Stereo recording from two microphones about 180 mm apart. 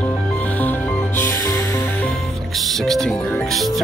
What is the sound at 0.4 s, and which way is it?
Music, 10° left (ahead or behind).